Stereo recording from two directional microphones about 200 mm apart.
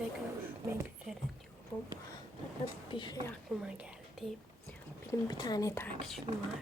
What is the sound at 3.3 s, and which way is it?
Speech, centre (ahead or behind).